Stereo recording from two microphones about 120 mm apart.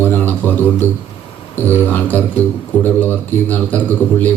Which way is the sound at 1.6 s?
15° left (ahead or behind).